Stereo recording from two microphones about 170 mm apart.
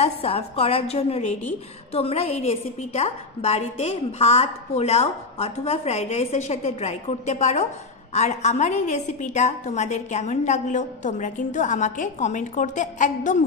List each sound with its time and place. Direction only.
0.0 s a woman's voice: 35° left (ahead or behind)